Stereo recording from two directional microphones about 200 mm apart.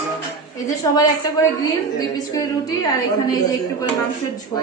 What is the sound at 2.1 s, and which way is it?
Music, 15° left (ahead or behind).